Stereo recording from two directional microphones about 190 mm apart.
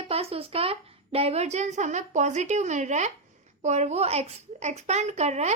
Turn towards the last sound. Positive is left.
turn(degrees=-35)  # may be behind; listen again after turning